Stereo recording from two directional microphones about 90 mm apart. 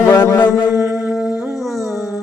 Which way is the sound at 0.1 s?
25° left (ahead or behind).